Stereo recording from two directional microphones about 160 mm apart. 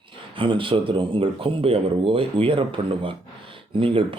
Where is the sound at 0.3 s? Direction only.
30° right (ahead or behind).